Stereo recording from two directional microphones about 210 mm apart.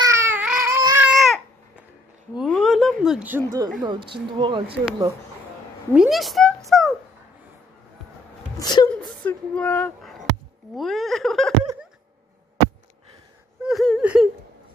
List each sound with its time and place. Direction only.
0.0 s baby cry: 15° right (ahead or behind)
2.3 s a sound: centre (ahead or behind)
3.8 s a woman's voice: 25° right (ahead or behind)
5.9 s speech: centre (ahead or behind)
6.7 s a sound: centre (ahead or behind)
8.5 s speech: 20° left (ahead or behind)
9.0 s speech: 5° left (ahead or behind)
13.6 s whimper: centre (ahead or behind)